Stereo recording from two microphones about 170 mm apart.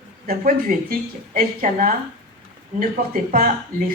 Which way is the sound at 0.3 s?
55° right (ahead or behind).